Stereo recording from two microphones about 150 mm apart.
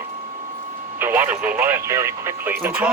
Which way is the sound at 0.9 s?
15° right (ahead or behind).